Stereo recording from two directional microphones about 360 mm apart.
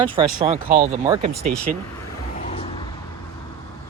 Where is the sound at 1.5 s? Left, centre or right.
Centre.